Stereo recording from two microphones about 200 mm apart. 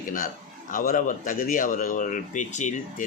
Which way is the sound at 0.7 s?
45° left (ahead or behind).